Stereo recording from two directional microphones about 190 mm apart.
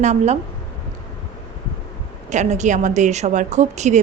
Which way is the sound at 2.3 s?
40° right (ahead or behind).